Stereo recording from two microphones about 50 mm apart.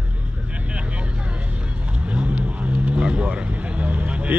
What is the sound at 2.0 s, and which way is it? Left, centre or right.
Vehicle, right.